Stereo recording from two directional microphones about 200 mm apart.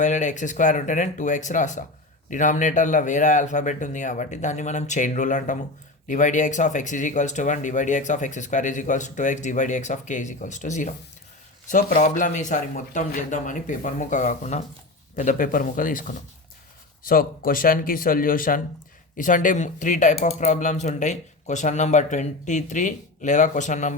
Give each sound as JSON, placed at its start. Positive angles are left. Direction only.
{"t": 0.0, "sound": "speech", "side_deg": 35}